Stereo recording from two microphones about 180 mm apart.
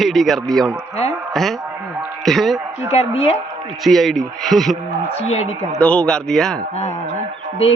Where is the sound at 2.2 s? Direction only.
Centre (ahead or behind).